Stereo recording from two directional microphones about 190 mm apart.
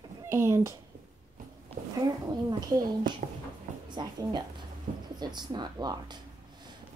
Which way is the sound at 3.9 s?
25° right (ahead or behind).